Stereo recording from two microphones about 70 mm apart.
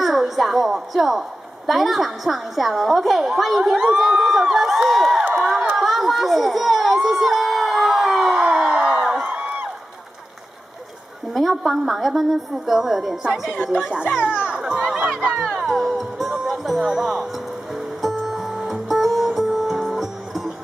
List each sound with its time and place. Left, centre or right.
0.0 s a woman's voice: centre
4.2 s crowd: centre
11.3 s a woman's voice: centre
14.1 s children playing: centre
15.4 s music: centre